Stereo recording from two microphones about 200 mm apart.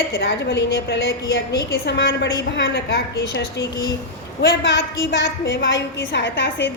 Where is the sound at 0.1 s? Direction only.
60° left (ahead or behind).